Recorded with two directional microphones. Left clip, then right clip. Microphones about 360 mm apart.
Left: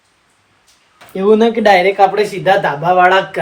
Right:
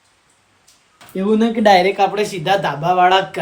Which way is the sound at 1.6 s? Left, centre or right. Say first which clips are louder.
Left 2 dB; centre.